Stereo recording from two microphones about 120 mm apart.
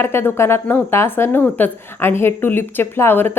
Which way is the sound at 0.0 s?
20° left (ahead or behind).